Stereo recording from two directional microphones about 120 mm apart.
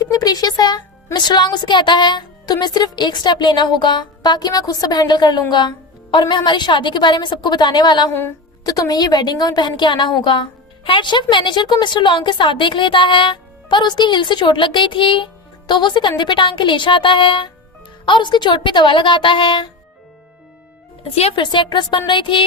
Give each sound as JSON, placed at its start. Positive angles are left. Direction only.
{"t": 0.0, "sound": "a woman's voice", "side_deg": 30}
{"t": 21.2, "sound": "a woman's voice", "side_deg": 45}